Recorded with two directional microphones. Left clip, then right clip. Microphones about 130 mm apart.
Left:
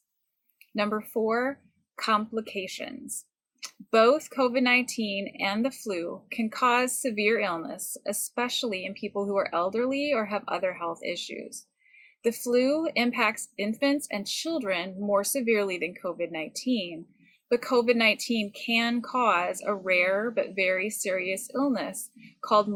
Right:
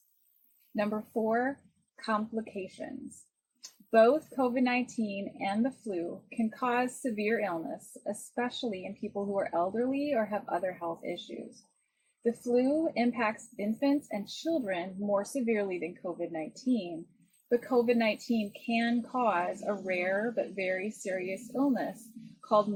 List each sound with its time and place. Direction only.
0.9 s a woman's voice: 25° left (ahead or behind)
3.9 s a woman's voice: 20° left (ahead or behind)